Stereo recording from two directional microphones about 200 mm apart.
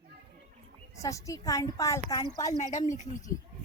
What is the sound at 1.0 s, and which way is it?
A woman's voice, 15° left (ahead or behind).